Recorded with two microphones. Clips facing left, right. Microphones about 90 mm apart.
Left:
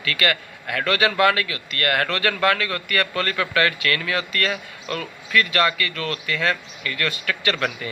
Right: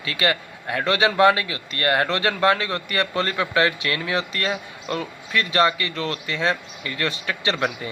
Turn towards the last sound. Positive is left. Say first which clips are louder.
# even
turn(degrees=-25)  # may be behind; listen again after turning